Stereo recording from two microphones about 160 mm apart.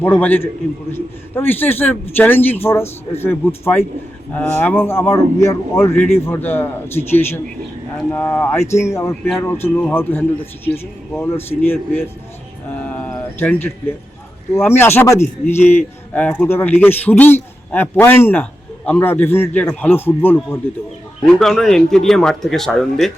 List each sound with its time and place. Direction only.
0.0 s a man's voice: 10° left (ahead or behind)
12.7 s a sound: 10° left (ahead or behind)
14.5 s a man's voice: 15° left (ahead or behind)